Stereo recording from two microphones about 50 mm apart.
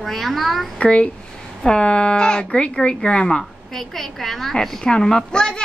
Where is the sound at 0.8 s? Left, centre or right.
Left.